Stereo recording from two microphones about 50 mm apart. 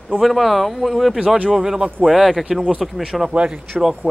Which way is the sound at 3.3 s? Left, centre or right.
Centre.